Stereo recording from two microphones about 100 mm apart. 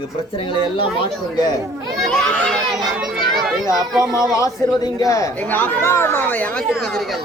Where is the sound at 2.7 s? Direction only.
5° right (ahead or behind).